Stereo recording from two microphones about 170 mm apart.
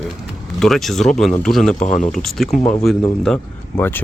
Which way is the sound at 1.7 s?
45° left (ahead or behind).